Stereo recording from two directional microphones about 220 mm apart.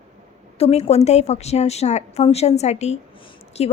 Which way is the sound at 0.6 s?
30° left (ahead or behind).